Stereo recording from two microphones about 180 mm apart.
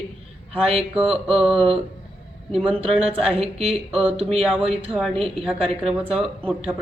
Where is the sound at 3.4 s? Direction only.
35° right (ahead or behind).